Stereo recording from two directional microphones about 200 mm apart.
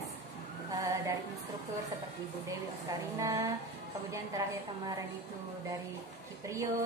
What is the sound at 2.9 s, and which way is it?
Speech, 15° right (ahead or behind).